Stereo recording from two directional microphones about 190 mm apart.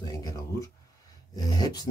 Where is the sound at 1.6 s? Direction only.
20° left (ahead or behind).